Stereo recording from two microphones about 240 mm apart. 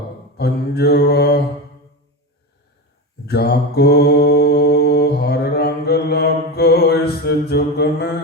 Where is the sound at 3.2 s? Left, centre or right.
Left.